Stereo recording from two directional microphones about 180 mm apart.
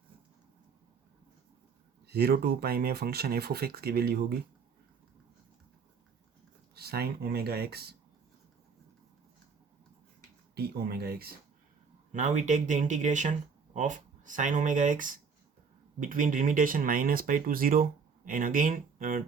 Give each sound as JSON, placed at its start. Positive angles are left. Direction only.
{"t": 2.0, "sound": "speech", "side_deg": -60}
{"t": 6.7, "sound": "speech", "side_deg": -60}
{"t": 10.5, "sound": "speech", "side_deg": -60}
{"t": 12.1, "sound": "speech", "side_deg": -45}